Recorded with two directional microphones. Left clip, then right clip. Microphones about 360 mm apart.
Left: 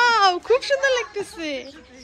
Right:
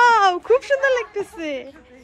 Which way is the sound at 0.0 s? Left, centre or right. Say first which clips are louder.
Right 3 dB; centre.